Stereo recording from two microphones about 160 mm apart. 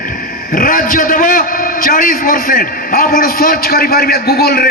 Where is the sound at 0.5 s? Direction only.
60° left (ahead or behind).